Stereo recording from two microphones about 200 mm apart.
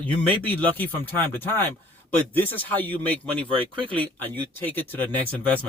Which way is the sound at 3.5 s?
25° right (ahead or behind).